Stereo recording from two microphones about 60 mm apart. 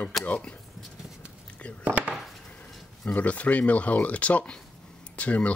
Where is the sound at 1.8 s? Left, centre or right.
Right.